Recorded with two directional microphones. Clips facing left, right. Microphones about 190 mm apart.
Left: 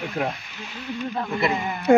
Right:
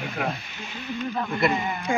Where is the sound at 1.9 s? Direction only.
65° left (ahead or behind).